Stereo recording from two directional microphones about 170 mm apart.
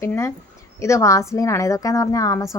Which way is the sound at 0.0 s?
15° left (ahead or behind).